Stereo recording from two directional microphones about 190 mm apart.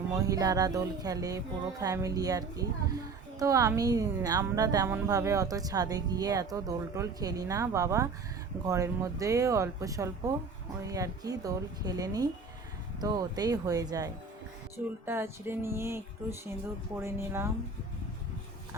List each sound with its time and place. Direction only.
0.1 s a woman's voice: 20° right (ahead or behind)
17.0 s speech: 15° right (ahead or behind)